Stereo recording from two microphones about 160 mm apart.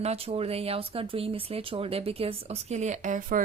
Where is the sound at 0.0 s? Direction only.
40° right (ahead or behind).